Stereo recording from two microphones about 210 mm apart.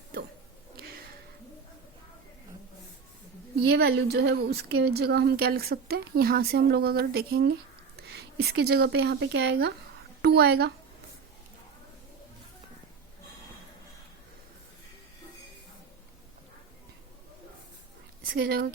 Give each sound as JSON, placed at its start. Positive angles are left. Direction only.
{"t": 3.7, "sound": "a woman's voice", "side_deg": -50}
{"t": 18.2, "sound": "a woman's voice", "side_deg": -45}